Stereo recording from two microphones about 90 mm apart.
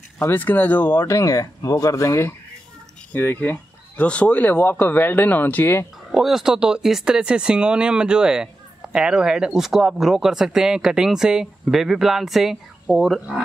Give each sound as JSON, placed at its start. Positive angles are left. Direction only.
{"t": 0.3, "sound": "speech", "side_deg": 20}
{"t": 1.0, "sound": "speech", "side_deg": 35}
{"t": 3.1, "sound": "speech", "side_deg": 20}
{"t": 6.1, "sound": "speech", "side_deg": -5}